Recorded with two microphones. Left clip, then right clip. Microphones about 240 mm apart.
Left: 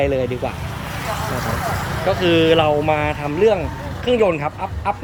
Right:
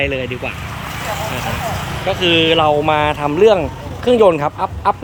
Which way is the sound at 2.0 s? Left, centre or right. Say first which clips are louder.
Right 2 dB; centre.